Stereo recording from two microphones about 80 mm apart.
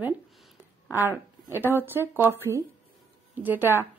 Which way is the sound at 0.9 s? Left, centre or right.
Right.